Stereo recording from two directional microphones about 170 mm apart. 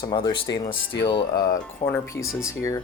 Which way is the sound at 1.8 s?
40° left (ahead or behind).